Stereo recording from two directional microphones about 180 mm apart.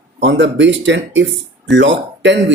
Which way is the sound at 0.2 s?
80° right.